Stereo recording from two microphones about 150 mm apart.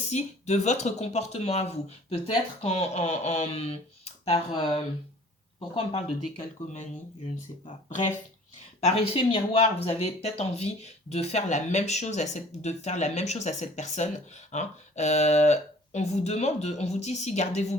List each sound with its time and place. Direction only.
0.1 s speech: 50° left (ahead or behind)
4.5 s speech: 30° left (ahead or behind)
7.6 s speech: 55° left (ahead or behind)
8.8 s speech: 40° left (ahead or behind)